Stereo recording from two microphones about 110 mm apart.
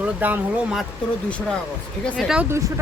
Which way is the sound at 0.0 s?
15° right (ahead or behind).